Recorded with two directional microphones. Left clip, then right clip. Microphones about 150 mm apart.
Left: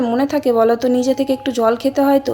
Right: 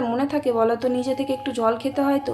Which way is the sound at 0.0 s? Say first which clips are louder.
Left 6 dB; 35° left (ahead or behind).